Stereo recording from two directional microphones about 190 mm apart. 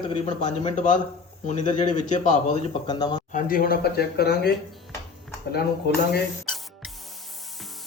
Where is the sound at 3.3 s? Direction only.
50° left (ahead or behind).